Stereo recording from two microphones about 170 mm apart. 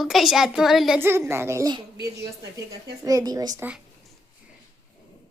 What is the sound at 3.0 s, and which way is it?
Speech, 20° right (ahead or behind).